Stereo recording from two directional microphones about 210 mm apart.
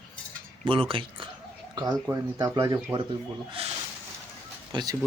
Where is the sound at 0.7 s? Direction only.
25° right (ahead or behind).